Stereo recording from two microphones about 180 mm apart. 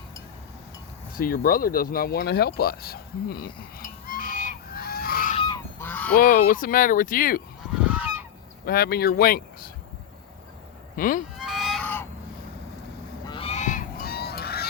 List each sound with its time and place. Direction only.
1.1 s speech: 55° left (ahead or behind)
5.5 s goose: 10° left (ahead or behind)
6.1 s speech: 50° left (ahead or behind)
7.9 s goose: 10° right (ahead or behind)
8.6 s speech: 60° left (ahead or behind)
10.9 s speech: 50° left (ahead or behind)
11.3 s fowl: centre (ahead or behind)
13.2 s goose: 30° left (ahead or behind); by 14.7 s 60° left (ahead or behind)